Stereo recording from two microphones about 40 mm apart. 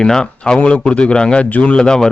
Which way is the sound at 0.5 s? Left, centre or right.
Left.